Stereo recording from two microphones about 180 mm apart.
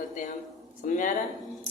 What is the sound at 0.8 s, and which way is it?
Speech, 45° left (ahead or behind).